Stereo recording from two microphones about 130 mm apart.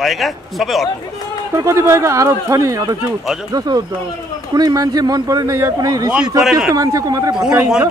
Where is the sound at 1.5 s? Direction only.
25° right (ahead or behind).